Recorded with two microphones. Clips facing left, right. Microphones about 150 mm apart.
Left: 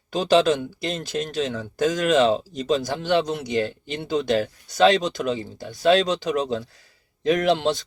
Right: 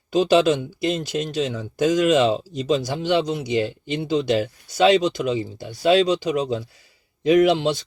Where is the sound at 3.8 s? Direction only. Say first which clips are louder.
Right 3 dB; 45° left (ahead or behind).